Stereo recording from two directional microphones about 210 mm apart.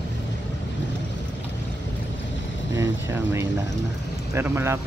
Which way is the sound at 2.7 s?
15° right (ahead or behind).